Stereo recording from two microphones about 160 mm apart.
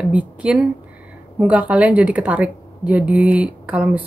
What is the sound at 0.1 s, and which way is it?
A woman's voice, 5° right (ahead or behind).